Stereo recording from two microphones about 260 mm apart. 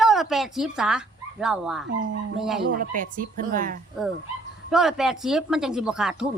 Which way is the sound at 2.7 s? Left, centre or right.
Right.